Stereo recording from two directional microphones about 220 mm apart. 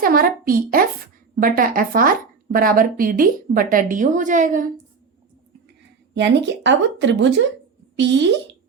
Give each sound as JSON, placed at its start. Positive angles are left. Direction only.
{"t": 0.0, "sound": "speech", "side_deg": -40}
{"t": 6.1, "sound": "speech", "side_deg": -55}